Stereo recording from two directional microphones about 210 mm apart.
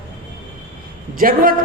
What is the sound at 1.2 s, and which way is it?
Speech, 40° right (ahead or behind).